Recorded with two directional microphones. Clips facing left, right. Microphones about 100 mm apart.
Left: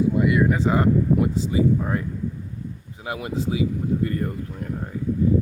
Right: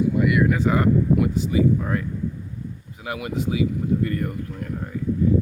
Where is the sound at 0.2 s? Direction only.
25° left (ahead or behind).